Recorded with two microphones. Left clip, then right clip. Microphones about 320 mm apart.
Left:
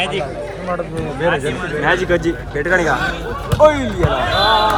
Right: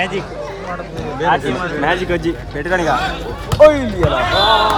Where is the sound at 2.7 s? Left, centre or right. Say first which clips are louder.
Even; centre.